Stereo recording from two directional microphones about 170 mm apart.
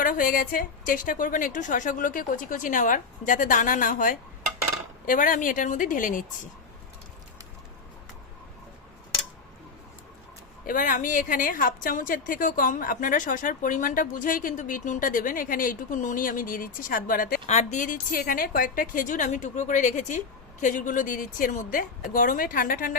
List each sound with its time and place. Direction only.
0.0 s a woman's voice: 55° left (ahead or behind)
10.7 s a woman's voice: 50° left (ahead or behind)
17.4 s a woman's voice: 45° left (ahead or behind)